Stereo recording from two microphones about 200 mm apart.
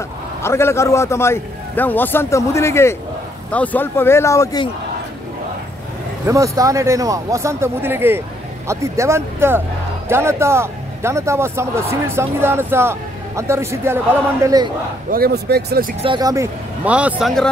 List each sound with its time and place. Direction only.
0.4 s a man's voice: 15° left (ahead or behind)
6.2 s a man's voice: 15° right (ahead or behind)
15.0 s speech: 50° right (ahead or behind)
16.0 s speech: 20° right (ahead or behind)
16.8 s a man's voice: 5° right (ahead or behind)